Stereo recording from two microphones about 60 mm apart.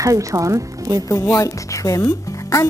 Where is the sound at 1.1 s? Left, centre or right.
Left.